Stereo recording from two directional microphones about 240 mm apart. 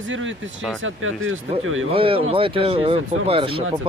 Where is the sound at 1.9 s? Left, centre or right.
Right.